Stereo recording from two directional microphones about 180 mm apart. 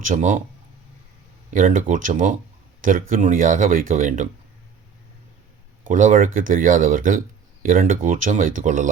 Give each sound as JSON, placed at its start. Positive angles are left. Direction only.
{"t": 0.0, "sound": "speech", "side_deg": -45}
{"t": 1.5, "sound": "speech", "side_deg": -50}
{"t": 5.9, "sound": "speech", "side_deg": -45}